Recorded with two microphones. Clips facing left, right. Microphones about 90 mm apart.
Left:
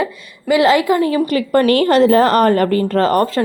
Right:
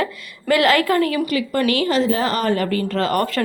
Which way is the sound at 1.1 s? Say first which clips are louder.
Left 6 dB; 40° left (ahead or behind).